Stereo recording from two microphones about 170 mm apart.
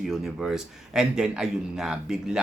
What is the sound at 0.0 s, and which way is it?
Speech, centre (ahead or behind).